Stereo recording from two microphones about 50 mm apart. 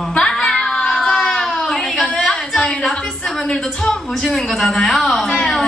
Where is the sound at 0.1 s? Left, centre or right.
Centre.